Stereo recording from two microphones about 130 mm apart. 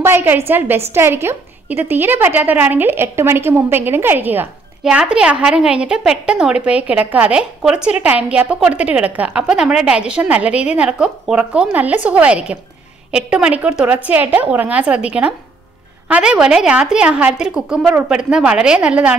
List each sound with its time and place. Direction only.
0.0 s a woman's voice: 15° right (ahead or behind)